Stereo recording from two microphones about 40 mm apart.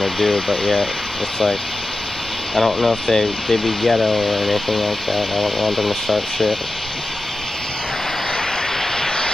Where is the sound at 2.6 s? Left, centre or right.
Centre.